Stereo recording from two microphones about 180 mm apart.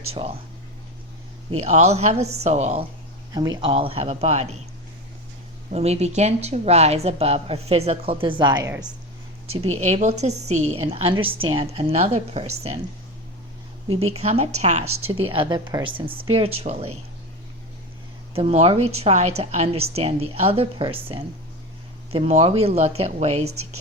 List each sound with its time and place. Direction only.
0.1 s a woman's voice: 35° right (ahead or behind)
1.5 s a woman's voice: 35° right (ahead or behind)
3.3 s a woman's voice: 20° right (ahead or behind); by 4.5 s 35° right (ahead or behind)
5.7 s a woman's voice: 35° right (ahead or behind)
9.6 s a woman's voice: 35° right (ahead or behind)
14.0 s a woman's voice: 35° right (ahead or behind)
18.3 s a woman's voice: 30° right (ahead or behind)